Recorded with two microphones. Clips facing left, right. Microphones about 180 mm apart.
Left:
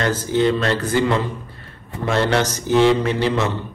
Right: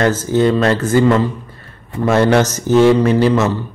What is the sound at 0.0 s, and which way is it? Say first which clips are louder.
Speech: right 4 dB; 45° right (ahead or behind).